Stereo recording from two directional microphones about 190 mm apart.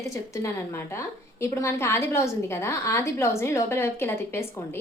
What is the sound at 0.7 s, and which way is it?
A woman's voice, 15° left (ahead or behind).